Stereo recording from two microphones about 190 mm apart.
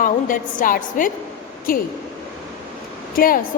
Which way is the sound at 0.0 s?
45° left (ahead or behind).